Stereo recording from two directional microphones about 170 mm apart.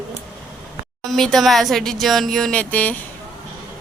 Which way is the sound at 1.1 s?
Centre (ahead or behind).